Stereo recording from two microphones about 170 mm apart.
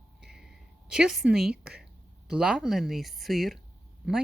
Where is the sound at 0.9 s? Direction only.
5° right (ahead or behind).